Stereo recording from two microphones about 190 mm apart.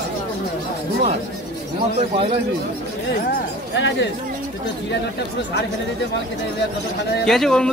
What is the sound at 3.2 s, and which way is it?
Speech, 70° left (ahead or behind).